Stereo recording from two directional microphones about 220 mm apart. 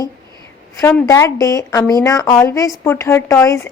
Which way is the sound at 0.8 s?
15° left (ahead or behind).